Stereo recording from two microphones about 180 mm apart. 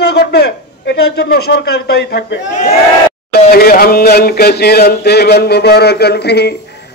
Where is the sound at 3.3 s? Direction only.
60° left (ahead or behind).